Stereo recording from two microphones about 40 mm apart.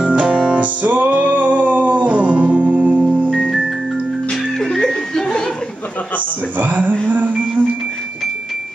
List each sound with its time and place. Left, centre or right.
0.0 s music: right
0.6 s music: right
4.3 s music: centre
6.6 s a sound: right
7.1 s music: right